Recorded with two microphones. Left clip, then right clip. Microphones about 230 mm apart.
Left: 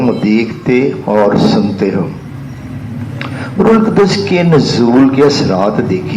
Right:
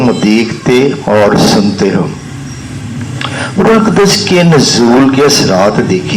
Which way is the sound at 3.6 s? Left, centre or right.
Right.